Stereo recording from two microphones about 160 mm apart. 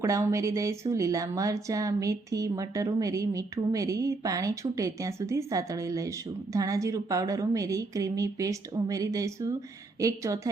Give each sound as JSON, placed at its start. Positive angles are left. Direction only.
{"t": 0.0, "sound": "speech", "side_deg": -20}